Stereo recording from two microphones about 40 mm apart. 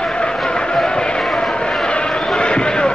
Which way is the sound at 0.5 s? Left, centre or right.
Left.